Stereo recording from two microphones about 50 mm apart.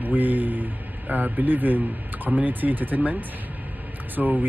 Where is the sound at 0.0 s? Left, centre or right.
Right.